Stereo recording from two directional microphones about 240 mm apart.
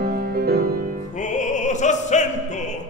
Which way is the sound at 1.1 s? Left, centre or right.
Left.